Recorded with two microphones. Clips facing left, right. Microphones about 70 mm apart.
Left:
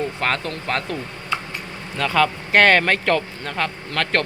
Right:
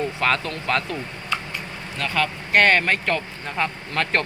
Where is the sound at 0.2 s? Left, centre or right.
Left.